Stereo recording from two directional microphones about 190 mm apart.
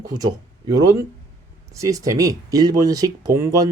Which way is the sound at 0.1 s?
20° right (ahead or behind).